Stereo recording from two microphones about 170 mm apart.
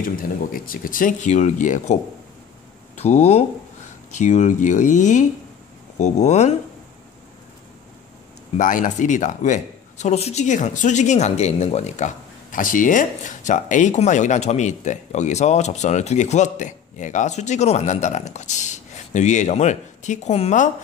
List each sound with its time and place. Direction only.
0.5 s speech: 55° left (ahead or behind)
3.0 s speech: 40° left (ahead or behind)
8.5 s speech: 50° left (ahead or behind)